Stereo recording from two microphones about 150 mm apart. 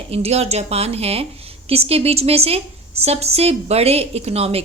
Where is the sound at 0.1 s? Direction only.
45° right (ahead or behind).